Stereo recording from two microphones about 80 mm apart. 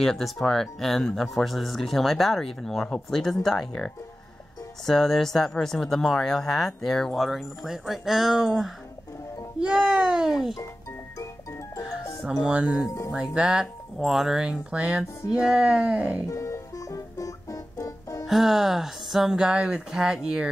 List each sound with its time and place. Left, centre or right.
0.0 s speech: centre
11.8 s music: centre
12.4 s speech: centre
16.3 s music: left
18.2 s speech: centre